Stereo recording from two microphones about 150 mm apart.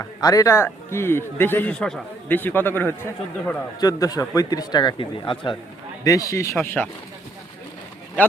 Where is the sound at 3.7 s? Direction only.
25° left (ahead or behind).